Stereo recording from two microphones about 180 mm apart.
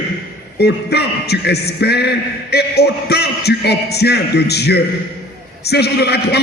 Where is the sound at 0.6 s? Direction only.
65° left (ahead or behind).